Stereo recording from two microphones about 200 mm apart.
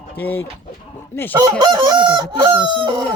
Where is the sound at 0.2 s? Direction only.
10° left (ahead or behind).